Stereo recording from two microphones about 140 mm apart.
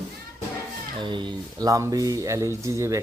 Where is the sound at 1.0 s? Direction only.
35° right (ahead or behind).